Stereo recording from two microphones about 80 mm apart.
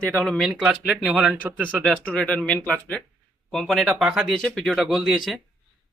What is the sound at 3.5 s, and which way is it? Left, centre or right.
Speech, centre.